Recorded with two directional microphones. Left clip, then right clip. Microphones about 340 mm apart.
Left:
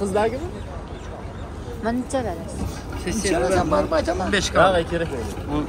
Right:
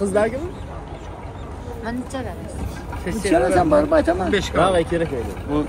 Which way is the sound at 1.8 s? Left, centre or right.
Left.